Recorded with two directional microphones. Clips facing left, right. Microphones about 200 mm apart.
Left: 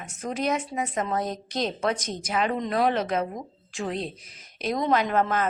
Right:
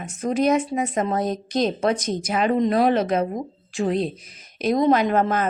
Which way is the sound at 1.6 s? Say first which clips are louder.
Right 5 dB; 45° right (ahead or behind).